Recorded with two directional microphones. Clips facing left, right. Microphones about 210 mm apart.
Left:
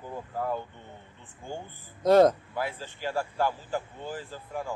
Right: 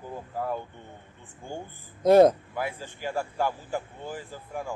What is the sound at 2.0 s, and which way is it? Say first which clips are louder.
Speech: right 2 dB; 15° right (ahead or behind).